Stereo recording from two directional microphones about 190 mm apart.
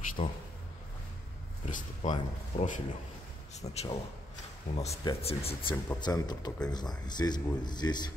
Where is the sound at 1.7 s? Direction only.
40° left (ahead or behind).